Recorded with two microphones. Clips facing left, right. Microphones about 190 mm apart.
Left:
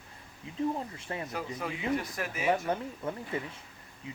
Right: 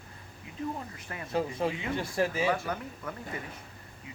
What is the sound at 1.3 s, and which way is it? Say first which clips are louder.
Speech: right 11 dB; 30° right (ahead or behind).